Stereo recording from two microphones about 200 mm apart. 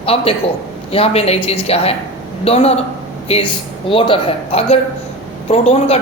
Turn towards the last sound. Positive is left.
turn(degrees=30)  # may be behind; listen again after turning